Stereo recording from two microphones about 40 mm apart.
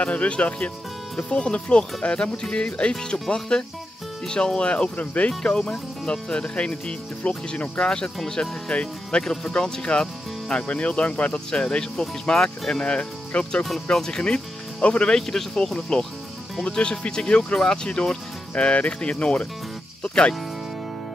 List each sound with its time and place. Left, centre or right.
0.0 s speech: left
5.4 s speech: centre; by 7.8 s left
7.8 s speech: centre
11.2 s speech: centre
15.1 s speech: centre